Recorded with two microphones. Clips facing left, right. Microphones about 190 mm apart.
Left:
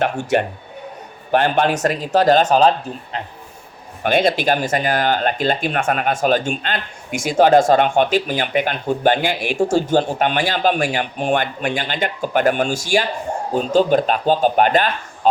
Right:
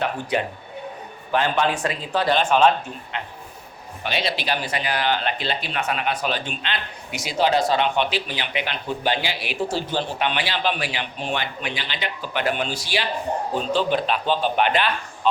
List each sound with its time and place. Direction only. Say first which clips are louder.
1.3 s speech: left 5 dB; 55° left (ahead or behind); by 3.2 s 35° left (ahead or behind)
4.0 s speech: left 9 dB; 50° left (ahead or behind)